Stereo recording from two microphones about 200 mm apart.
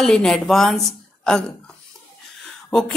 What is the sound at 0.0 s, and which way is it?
Speech, centre (ahead or behind).